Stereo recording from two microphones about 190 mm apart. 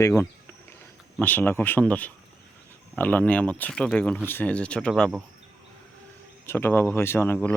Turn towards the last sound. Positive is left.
turn(degrees=10)  # may be behind; listen again after turning